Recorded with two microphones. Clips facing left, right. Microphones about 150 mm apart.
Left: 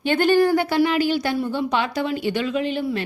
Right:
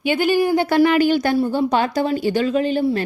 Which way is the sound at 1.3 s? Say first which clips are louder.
Right 5 dB; 40° right (ahead or behind).